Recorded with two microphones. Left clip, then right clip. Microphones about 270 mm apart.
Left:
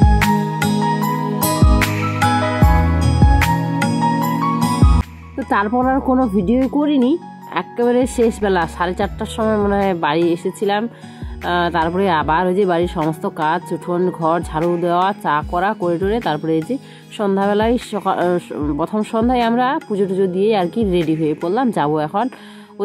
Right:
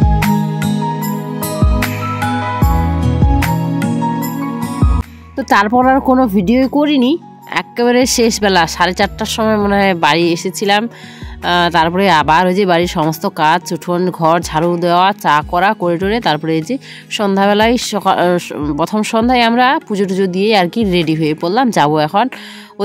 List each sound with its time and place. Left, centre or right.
0.0 s music: centre
5.5 s speech: right